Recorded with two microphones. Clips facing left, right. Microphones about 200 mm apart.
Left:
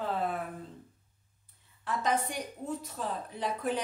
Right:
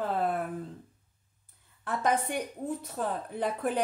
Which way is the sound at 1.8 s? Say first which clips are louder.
Right 2 dB; 55° right (ahead or behind).